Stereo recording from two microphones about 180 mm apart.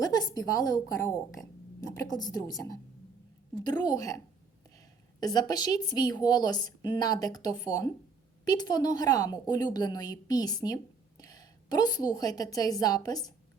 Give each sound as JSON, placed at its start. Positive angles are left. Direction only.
{"t": 0.0, "sound": "a woman's voice", "side_deg": 20}
{"t": 3.8, "sound": "a woman's voice", "side_deg": 20}